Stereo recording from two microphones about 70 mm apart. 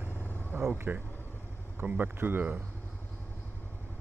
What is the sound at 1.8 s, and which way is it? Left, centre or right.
Speech, right.